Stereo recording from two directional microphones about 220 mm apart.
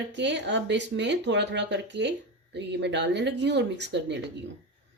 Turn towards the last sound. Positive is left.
turn(degrees=-55)  # may be behind; listen again after turning